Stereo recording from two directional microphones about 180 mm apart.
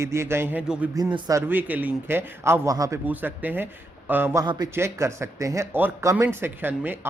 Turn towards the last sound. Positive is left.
turn(degrees=-10)  # may be behind; listen again after turning